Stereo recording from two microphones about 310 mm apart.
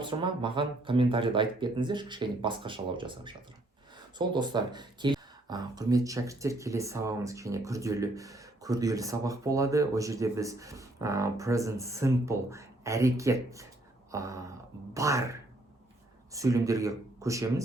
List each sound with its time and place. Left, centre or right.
0.0 s speech: centre